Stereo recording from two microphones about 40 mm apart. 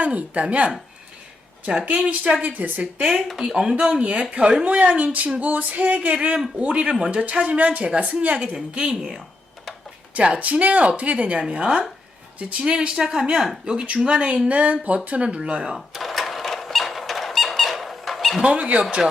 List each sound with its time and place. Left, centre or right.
0.0 s music: right
1.8 s music: right
2.4 s a woman's voice: right
3.0 s a woman's voice: centre
3.2 s a woman's voice: centre; by 4.9 s right
4.9 s music: right
7.9 s a woman's voice: right
10.2 s music: right
11.4 s a woman's voice: right
14.4 s music: right
15.4 s a woman's voice: right
15.9 s squeak: centre
18.7 s a woman's voice: right